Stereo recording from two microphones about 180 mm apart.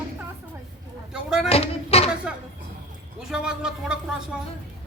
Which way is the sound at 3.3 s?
5° right (ahead or behind).